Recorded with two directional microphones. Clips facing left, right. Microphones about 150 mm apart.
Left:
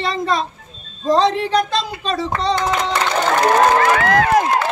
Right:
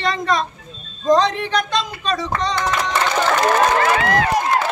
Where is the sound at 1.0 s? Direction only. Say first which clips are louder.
Even; 30° left (ahead or behind).